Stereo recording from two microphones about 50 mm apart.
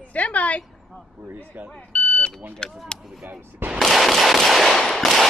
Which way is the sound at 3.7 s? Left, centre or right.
Centre.